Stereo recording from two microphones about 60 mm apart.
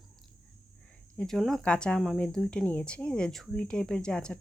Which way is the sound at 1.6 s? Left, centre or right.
Centre.